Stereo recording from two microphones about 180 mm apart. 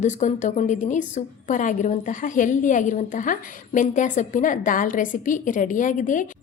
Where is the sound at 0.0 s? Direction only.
40° left (ahead or behind).